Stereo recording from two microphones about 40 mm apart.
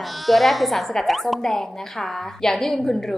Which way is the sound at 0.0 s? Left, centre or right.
Centre.